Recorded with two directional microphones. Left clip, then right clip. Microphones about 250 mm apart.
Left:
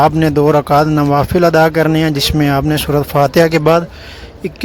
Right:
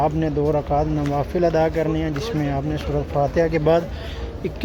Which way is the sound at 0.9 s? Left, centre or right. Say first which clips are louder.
Left 10 dB; left.